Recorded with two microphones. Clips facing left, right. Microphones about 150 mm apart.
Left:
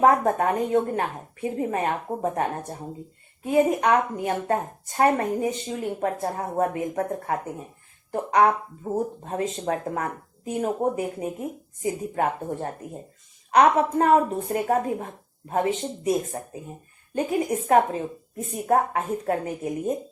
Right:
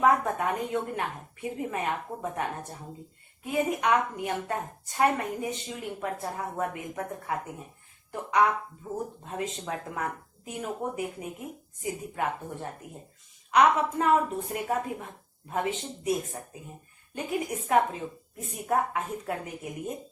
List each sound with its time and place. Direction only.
0.0 s a woman's voice: 40° left (ahead or behind)
17.5 s speech: 45° left (ahead or behind)